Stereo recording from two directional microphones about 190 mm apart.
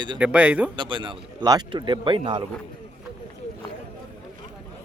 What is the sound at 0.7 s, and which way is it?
Speech, 25° right (ahead or behind).